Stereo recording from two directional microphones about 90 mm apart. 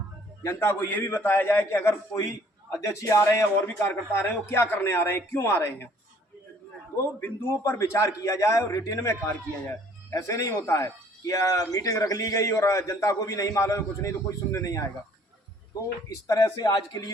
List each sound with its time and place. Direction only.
0.4 s a man's voice: 30° left (ahead or behind)
6.9 s speech: 30° left (ahead or behind)
16.0 s a man's voice: 40° left (ahead or behind)